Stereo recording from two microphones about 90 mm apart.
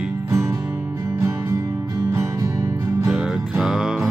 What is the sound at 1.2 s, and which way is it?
Music, 35° right (ahead or behind).